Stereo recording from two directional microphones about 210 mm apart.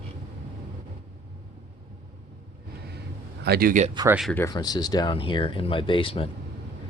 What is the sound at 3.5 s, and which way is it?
Speech, 45° right (ahead or behind).